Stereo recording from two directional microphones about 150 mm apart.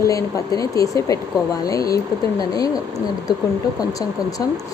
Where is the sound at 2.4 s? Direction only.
25° left (ahead or behind).